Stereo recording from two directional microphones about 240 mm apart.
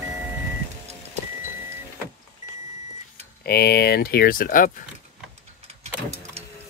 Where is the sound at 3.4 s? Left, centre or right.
Left.